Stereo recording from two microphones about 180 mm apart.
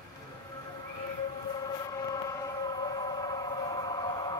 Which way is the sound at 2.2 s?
20° left (ahead or behind).